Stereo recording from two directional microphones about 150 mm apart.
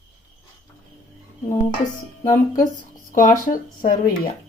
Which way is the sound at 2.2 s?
55° left (ahead or behind).